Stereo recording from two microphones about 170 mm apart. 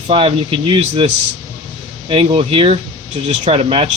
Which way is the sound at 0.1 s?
35° right (ahead or behind).